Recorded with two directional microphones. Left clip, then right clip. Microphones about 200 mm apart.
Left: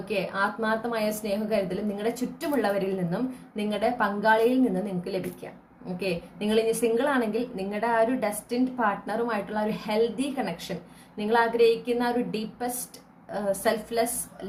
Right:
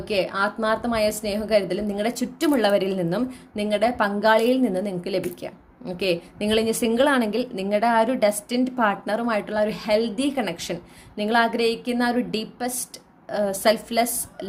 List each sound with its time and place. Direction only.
0.1 s a woman's voice: 45° right (ahead or behind)